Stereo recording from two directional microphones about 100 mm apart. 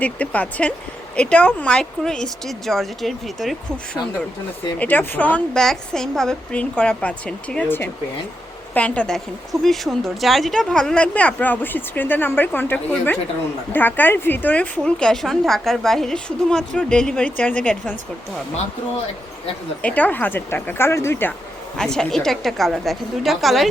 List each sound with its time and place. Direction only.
0.0 s a woman's voice: 15° left (ahead or behind)
4.8 s a woman's voice: 15° left (ahead or behind)
8.7 s a woman's voice: 15° left (ahead or behind)
19.8 s speech: 15° left (ahead or behind)
21.8 s speech: 5° left (ahead or behind)